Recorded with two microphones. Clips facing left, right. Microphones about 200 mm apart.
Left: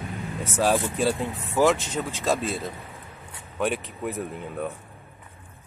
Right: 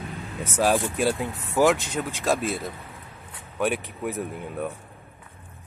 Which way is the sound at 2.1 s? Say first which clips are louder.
Right 1 dB; 15° right (ahead or behind).